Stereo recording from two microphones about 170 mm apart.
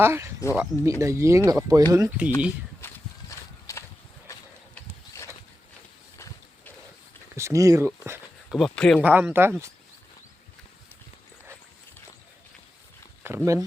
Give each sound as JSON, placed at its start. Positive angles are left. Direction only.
{"t": 0.0, "sound": "speech", "side_deg": -15}
{"t": 2.8, "sound": "a sound", "side_deg": 20}
{"t": 7.3, "sound": "speech", "side_deg": -15}
{"t": 8.4, "sound": "speech", "side_deg": 0}
{"t": 9.0, "sound": "speech", "side_deg": -10}
{"t": 13.2, "sound": "speech", "side_deg": -15}